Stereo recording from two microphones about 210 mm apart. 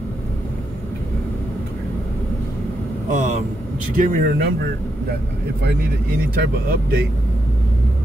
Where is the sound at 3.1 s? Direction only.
35° right (ahead or behind).